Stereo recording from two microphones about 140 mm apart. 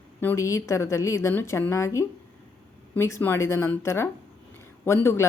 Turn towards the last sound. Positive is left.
turn(degrees=20)  # may be behind; listen again after turning